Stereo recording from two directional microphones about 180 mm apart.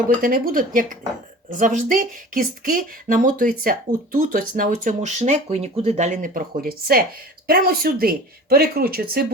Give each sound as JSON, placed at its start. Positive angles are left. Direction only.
{"t": 0.2, "sound": "speech", "side_deg": -55}